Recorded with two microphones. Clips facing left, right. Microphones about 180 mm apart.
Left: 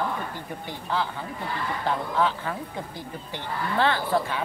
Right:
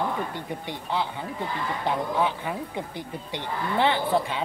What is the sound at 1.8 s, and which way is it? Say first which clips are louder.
Speech: even; 15° right (ahead or behind).